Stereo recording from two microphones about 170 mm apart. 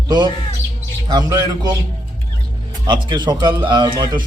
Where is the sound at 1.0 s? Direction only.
20° right (ahead or behind).